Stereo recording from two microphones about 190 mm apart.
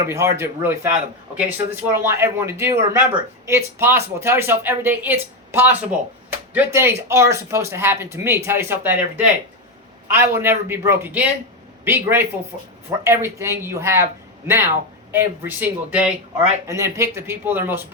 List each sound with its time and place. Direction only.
0.1 s speech: 15° right (ahead or behind)